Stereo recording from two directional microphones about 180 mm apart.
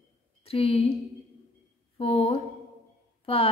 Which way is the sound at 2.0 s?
30° left (ahead or behind).